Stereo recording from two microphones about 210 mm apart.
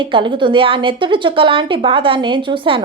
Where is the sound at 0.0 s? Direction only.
25° right (ahead or behind).